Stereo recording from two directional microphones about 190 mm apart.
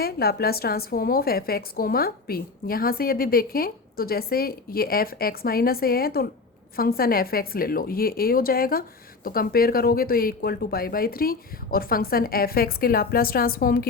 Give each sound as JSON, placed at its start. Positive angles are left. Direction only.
{"t": 0.0, "sound": "a woman's voice", "side_deg": 55}